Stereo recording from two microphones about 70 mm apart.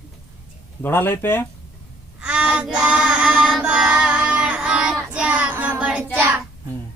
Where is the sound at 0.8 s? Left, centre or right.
Left.